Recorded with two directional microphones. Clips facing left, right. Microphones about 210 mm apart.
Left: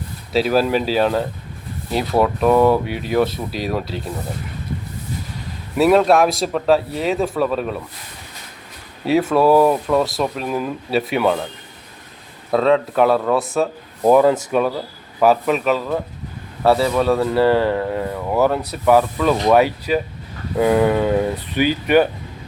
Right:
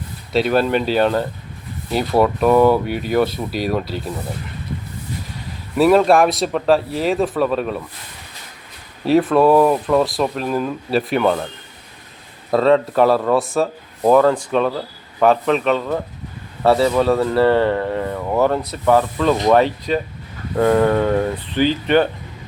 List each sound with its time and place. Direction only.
0.3 s speech: centre (ahead or behind)
5.7 s speech: centre (ahead or behind)
9.3 s speech: centre (ahead or behind)
12.5 s speech: centre (ahead or behind)